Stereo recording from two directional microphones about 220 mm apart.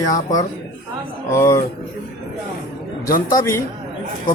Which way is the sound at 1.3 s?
15° left (ahead or behind).